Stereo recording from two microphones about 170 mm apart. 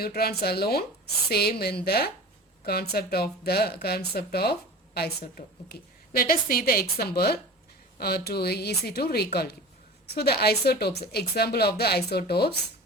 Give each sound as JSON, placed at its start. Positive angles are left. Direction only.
{"t": 0.0, "sound": "a woman's voice", "side_deg": 65}
{"t": 7.9, "sound": "a woman's voice", "side_deg": 65}